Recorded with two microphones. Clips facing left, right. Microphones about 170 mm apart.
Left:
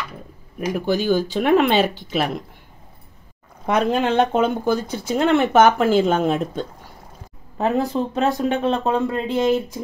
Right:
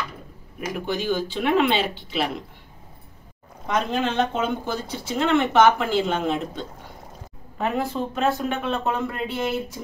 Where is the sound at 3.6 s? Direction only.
60° left (ahead or behind).